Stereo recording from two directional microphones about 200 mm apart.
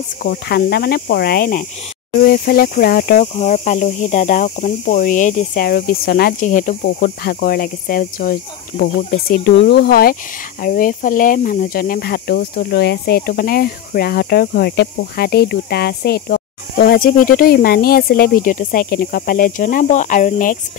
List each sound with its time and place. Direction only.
0.2 s speech: 50° left (ahead or behind)
3.3 s speech: 35° left (ahead or behind)